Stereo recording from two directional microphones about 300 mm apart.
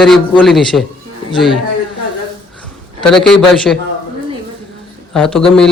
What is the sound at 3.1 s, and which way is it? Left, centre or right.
Speech, centre.